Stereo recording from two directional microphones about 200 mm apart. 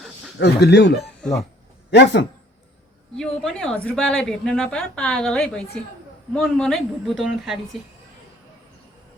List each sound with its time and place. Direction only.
0.3 s speech: 60° left (ahead or behind)
1.2 s a woman's voice: 5° left (ahead or behind)
1.9 s speech: 60° left (ahead or behind)
3.2 s a woman's voice: 5° left (ahead or behind)